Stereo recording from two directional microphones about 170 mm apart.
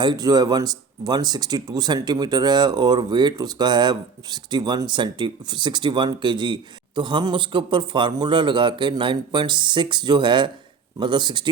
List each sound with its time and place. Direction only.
0.0 s speech: 25° right (ahead or behind)